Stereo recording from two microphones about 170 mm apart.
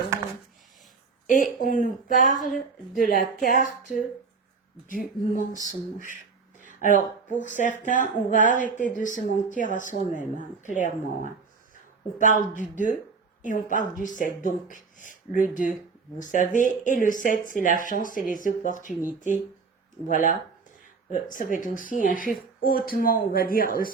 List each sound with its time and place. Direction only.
1.3 s speech: 50° left (ahead or behind)
2.3 s speech: centre (ahead or behind)
3.0 s speech: 55° left (ahead or behind)
5.6 s speech: 50° left (ahead or behind)
21.3 s speech: 50° left (ahead or behind)